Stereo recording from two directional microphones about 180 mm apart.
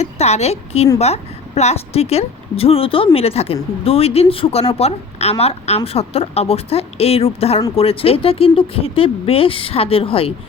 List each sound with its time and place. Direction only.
0.0 s a woman's voice: 35° left (ahead or behind)